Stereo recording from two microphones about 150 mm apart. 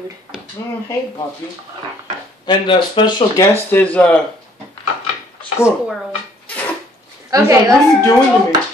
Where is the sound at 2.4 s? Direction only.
30° left (ahead or behind).